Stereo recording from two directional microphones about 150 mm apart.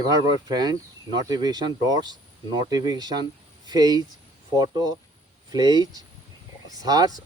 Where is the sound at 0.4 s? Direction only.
25° right (ahead or behind).